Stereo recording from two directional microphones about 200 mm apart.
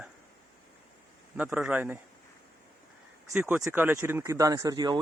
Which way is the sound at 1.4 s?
10° right (ahead or behind).